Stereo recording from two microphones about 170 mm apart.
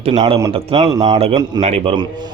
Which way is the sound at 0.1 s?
25° right (ahead or behind).